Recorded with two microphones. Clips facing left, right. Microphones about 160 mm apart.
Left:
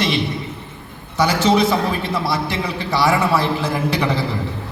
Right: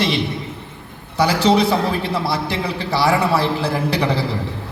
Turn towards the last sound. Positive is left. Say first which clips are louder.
# even
turn(degrees=-35)  # may be behind; listen again after turning